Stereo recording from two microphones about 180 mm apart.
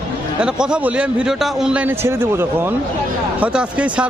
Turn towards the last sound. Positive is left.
turn(degrees=-5)  # may be behind; listen again after turning